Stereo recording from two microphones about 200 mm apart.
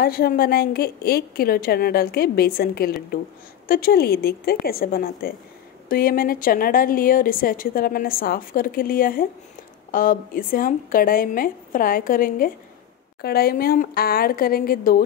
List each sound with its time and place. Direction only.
0.0 s a woman's voice: 50° left (ahead or behind)